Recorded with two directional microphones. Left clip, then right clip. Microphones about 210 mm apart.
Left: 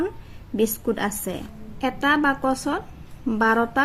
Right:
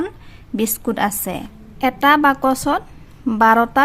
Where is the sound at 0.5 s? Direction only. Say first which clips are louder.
Right 2 dB; 40° right (ahead or behind).